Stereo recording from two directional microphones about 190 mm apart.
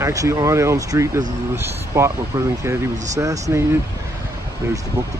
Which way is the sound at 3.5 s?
15° right (ahead or behind).